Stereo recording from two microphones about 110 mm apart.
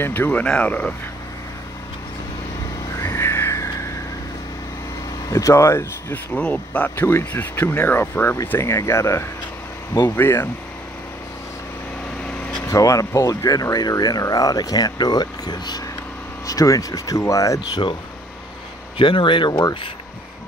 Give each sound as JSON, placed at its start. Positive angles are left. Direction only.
{"t": 0.0, "sound": "speech", "side_deg": 15}
{"t": 3.0, "sound": "vehicle", "side_deg": 25}
{"t": 5.3, "sound": "speech", "side_deg": 25}
{"t": 6.3, "sound": "speech", "side_deg": 10}
{"t": 12.6, "sound": "speech", "side_deg": 30}
{"t": 18.9, "sound": "speech", "side_deg": 50}